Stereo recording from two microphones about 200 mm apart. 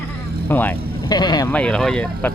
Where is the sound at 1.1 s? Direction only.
20° left (ahead or behind).